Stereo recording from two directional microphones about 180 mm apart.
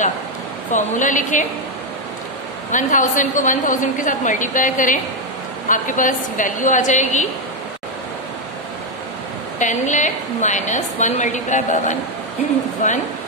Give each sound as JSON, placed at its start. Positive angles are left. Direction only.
{"t": 0.7, "sound": "a woman's voice", "side_deg": 45}
{"t": 2.7, "sound": "a woman's voice", "side_deg": 45}
{"t": 9.6, "sound": "a woman's voice", "side_deg": 45}